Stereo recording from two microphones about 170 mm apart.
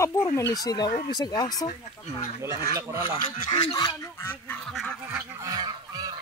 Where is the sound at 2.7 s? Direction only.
20° right (ahead or behind).